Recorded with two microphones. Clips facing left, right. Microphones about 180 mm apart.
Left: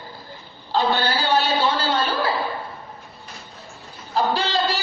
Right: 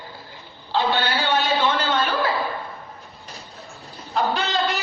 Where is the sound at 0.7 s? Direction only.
40° left (ahead or behind).